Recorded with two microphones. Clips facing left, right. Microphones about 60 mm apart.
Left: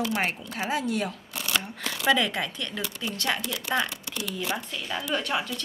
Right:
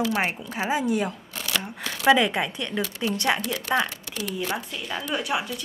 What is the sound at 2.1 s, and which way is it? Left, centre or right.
Speech, right.